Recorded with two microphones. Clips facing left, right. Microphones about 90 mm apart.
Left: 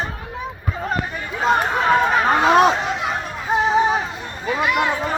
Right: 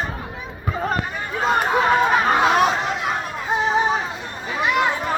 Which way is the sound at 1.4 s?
5° right (ahead or behind).